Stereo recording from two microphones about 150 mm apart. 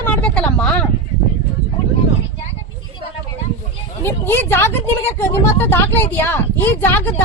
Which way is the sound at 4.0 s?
15° left (ahead or behind).